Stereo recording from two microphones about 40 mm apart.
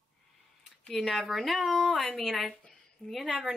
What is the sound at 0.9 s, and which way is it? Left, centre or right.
A woman's voice, centre.